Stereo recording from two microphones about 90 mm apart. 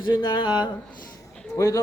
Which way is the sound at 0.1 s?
55° left (ahead or behind).